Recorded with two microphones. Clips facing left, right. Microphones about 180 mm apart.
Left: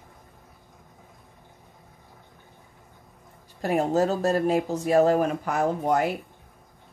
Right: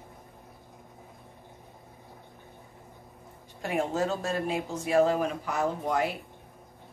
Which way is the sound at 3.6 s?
40° left (ahead or behind).